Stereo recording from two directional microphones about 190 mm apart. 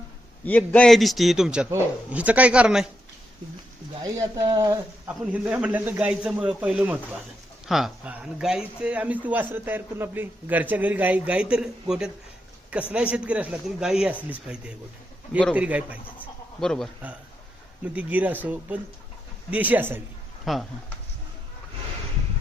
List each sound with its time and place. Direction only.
0.4 s a man's voice: 10° left (ahead or behind)
4.0 s a man's voice: 15° right (ahead or behind); by 16.9 s centre (ahead or behind)
17.9 s a man's voice: 10° right (ahead or behind)